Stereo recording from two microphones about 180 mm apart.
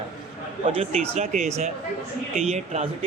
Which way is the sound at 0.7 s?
35° right (ahead or behind).